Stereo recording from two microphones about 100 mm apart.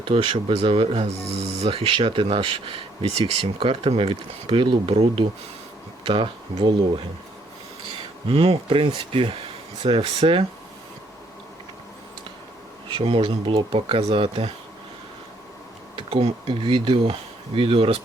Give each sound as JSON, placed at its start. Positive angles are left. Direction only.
{"t": 0.0, "sound": "speech", "side_deg": -65}
{"t": 1.5, "sound": "speech", "side_deg": -90}
{"t": 2.0, "sound": "speech", "side_deg": -55}
{"t": 2.2, "sound": "speech", "side_deg": -65}
{"t": 6.1, "sound": "speech", "side_deg": -60}
{"t": 8.3, "sound": "speech", "side_deg": -70}
{"t": 12.9, "sound": "speech", "side_deg": -65}
{"t": 16.0, "sound": "speech", "side_deg": -75}